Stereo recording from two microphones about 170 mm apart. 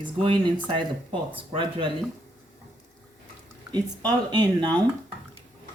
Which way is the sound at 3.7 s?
25° right (ahead or behind).